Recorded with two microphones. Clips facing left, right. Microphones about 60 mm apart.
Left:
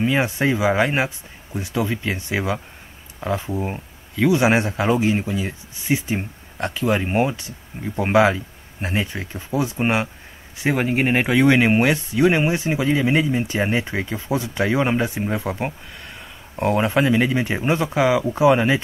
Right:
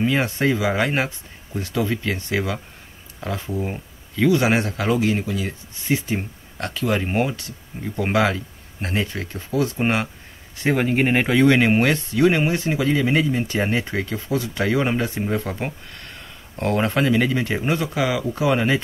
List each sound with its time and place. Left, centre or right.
0.0 s speech: centre
3.6 s speech: centre